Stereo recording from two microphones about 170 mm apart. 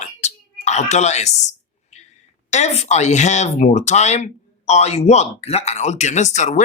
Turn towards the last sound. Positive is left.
turn(degrees=45)  # may be behind; listen again after turning